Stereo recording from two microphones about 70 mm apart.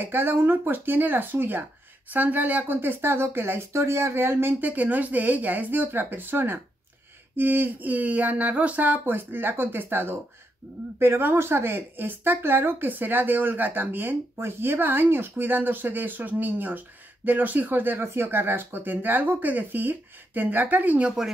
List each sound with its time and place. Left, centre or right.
0.0 s a woman's voice: right